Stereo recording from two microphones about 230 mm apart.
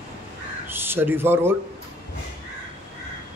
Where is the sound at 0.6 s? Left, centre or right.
Centre.